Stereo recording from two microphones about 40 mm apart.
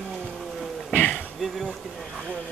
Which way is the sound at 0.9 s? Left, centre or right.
Left.